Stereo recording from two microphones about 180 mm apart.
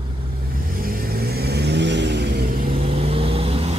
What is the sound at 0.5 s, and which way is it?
Vehicle, 55° right (ahead or behind).